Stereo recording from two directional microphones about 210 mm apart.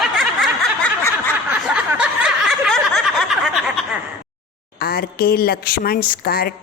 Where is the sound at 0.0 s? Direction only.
Centre (ahead or behind).